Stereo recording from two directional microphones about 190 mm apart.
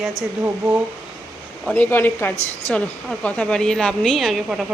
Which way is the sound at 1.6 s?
10° left (ahead or behind).